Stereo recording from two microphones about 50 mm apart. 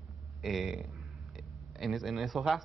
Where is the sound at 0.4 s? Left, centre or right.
Centre.